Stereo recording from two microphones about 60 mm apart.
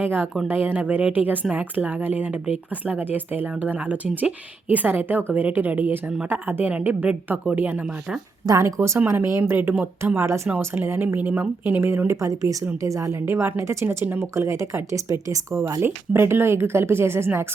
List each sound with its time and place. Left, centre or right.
0.0 s a woman's voice: right
8.6 s speech: right
9.0 s a woman's voice: right
12.2 s speech: right
13.2 s speech: right
13.8 s a woman's voice: right
14.2 s speech: right
15.8 s speech: right